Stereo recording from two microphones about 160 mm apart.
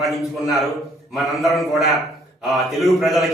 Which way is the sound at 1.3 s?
Centre (ahead or behind).